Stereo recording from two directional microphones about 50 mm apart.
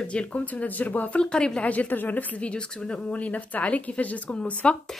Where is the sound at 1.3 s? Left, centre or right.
Centre.